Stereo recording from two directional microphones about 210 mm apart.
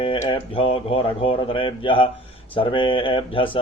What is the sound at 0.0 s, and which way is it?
Speech, 25° left (ahead or behind).